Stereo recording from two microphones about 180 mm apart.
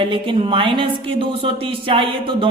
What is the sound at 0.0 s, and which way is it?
Speech, 25° right (ahead or behind).